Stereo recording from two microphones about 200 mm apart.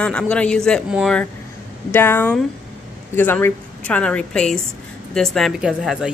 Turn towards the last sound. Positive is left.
turn(degrees=-5)  # may be behind; listen again after turning